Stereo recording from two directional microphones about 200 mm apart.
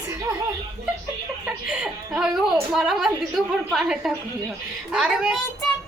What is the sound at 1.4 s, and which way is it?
Speech, 5° right (ahead or behind).